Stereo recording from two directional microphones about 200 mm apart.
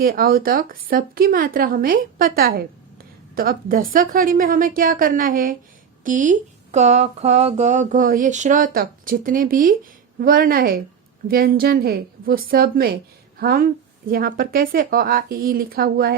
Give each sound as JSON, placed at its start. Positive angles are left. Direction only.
{"t": 0.0, "sound": "a woman's voice", "side_deg": -50}